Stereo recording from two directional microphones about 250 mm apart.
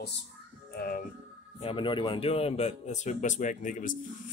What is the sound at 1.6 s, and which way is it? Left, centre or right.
Speech, left.